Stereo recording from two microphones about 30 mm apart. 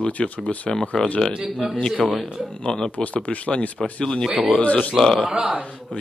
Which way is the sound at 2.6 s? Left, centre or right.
Left.